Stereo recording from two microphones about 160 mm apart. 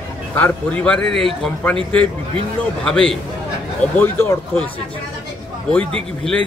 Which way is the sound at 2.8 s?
5° left (ahead or behind).